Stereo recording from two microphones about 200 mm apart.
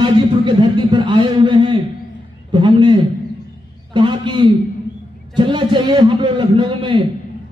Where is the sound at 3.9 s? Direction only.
25° right (ahead or behind).